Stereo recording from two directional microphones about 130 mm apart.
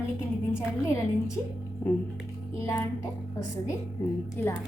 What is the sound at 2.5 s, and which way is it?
Speech, 20° left (ahead or behind).